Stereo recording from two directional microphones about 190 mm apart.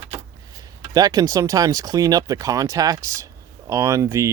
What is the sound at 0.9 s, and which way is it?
Speech, 20° right (ahead or behind).